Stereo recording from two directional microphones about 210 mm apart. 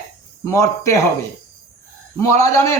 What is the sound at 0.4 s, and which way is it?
Speech, 15° left (ahead or behind).